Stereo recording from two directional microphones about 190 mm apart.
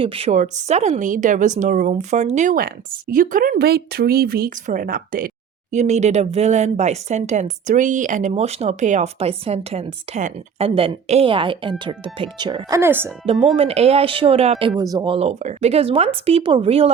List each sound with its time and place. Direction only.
0.0 s speech: 30° right (ahead or behind); by 5.3 s 50° right (ahead or behind)
5.7 s speech: 35° right (ahead or behind)
12.8 s speech: 10° right (ahead or behind)
13.6 s speech: 30° right (ahead or behind)
14.8 s speech: 20° right (ahead or behind)